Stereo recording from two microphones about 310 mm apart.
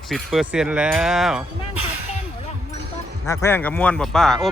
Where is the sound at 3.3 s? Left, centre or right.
Centre.